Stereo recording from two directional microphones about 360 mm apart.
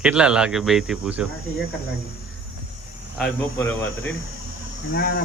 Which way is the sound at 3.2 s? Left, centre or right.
Centre.